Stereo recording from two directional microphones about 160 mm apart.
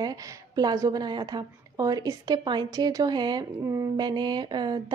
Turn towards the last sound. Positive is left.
turn(degrees=-25)  # may be behind; listen again after turning